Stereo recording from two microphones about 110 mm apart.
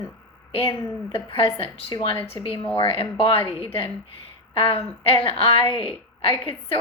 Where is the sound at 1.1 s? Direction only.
55° left (ahead or behind).